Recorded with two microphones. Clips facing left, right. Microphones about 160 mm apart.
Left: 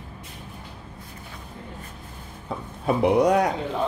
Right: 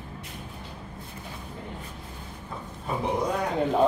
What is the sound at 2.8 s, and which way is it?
Speech, 75° left (ahead or behind).